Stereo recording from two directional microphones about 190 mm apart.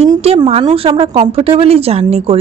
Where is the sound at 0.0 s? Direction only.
30° right (ahead or behind).